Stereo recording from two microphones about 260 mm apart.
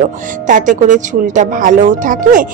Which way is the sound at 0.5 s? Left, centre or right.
Right.